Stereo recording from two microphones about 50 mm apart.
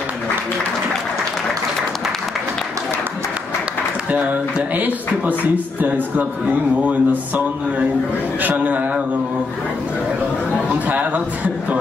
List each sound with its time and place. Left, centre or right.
4.7 s a man's voice: right
10.9 s a man's voice: right